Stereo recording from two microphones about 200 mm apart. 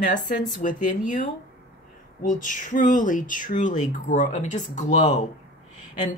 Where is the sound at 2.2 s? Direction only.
40° left (ahead or behind).